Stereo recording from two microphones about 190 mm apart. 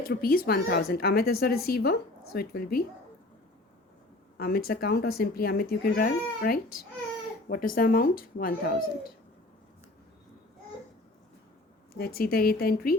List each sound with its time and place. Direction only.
0.0 s speech: 50° left (ahead or behind)
4.4 s speech: 50° left (ahead or behind)
11.9 s speech: 55° left (ahead or behind)